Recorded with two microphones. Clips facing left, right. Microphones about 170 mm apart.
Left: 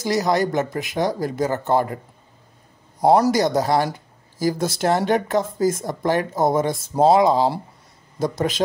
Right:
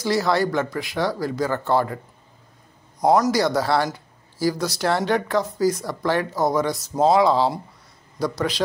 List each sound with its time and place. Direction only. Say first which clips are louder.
0.0 s speech: left 1 dB; 20° left (ahead or behind)
3.0 s speech: left 2 dB; 30° left (ahead or behind)